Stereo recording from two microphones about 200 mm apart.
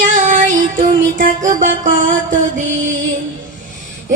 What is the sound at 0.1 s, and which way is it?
Music, 40° right (ahead or behind).